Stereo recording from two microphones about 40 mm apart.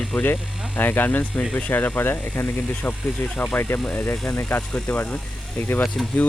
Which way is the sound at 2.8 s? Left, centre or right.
Left.